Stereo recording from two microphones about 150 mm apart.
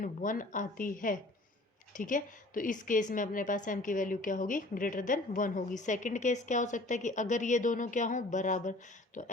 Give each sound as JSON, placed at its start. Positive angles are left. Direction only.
{"t": 0.0, "sound": "a woman's voice", "side_deg": 65}